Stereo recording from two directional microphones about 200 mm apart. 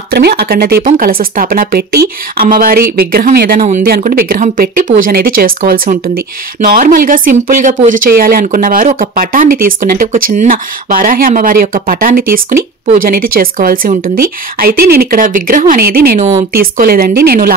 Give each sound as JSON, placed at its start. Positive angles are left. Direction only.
{"t": 0.1, "sound": "speech", "side_deg": -50}